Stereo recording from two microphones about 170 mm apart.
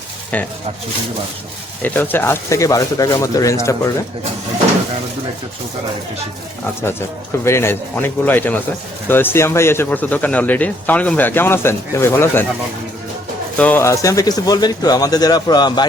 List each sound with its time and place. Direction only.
1.8 s speech: 10° left (ahead or behind)
7.4 s speech: 15° left (ahead or behind)
13.6 s speech: 10° left (ahead or behind)